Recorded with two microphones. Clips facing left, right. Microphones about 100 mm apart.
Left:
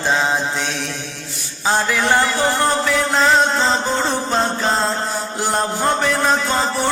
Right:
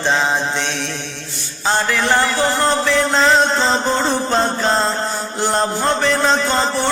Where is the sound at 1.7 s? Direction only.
10° left (ahead or behind).